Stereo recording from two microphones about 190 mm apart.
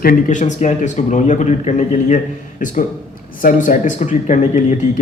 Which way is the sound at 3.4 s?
45° left (ahead or behind).